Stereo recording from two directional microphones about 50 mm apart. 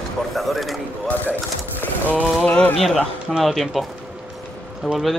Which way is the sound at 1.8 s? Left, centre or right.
Left.